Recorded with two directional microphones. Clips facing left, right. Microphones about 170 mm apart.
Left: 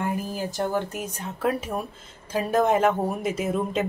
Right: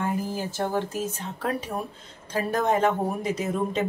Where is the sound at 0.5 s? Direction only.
15° left (ahead or behind).